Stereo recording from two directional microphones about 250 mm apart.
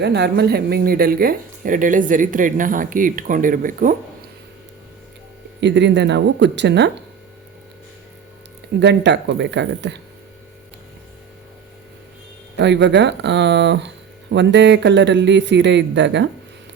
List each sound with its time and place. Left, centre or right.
0.0 s speech: right
5.5 s speech: right
8.8 s speech: right
12.5 s speech: right